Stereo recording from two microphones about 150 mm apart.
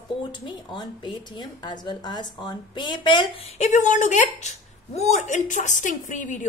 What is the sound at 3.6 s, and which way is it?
A woman's voice, 55° left (ahead or behind).